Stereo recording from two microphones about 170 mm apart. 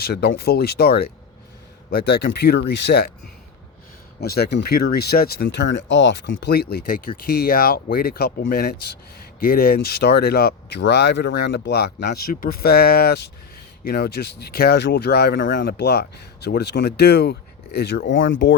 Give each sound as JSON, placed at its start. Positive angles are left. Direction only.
{"t": 0.0, "sound": "speech", "side_deg": 70}
{"t": 4.2, "sound": "speech", "side_deg": 70}
{"t": 18.1, "sound": "speech", "side_deg": 90}